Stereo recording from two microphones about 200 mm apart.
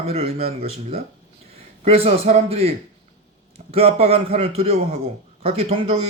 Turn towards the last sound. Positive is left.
turn(degrees=-30)  # may be behind; listen again after turning